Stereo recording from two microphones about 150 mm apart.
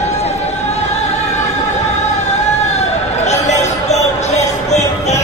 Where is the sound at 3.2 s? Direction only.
50° left (ahead or behind).